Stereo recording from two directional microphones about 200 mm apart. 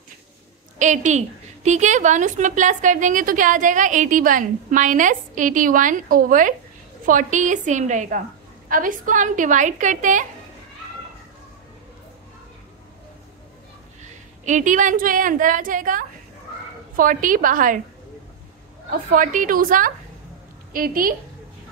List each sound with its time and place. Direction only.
0.7 s a woman's voice: 40° right (ahead or behind)
14.4 s a woman's voice: 40° right (ahead or behind)
18.9 s a woman's voice: 40° right (ahead or behind)